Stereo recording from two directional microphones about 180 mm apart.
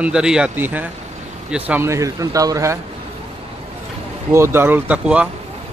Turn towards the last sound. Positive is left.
turn(degrees=-5)  # may be behind; listen again after turning